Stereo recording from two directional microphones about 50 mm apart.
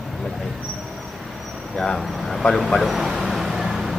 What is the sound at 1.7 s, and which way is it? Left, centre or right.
Speech, centre.